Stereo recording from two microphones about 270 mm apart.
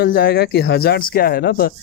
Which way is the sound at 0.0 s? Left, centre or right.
Left.